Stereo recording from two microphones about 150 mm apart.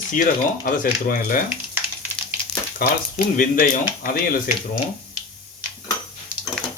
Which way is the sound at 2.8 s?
90° left.